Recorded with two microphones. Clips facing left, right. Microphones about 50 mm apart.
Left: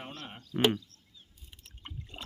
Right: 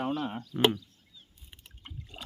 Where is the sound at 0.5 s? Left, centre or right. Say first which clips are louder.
Right 1 dB; left.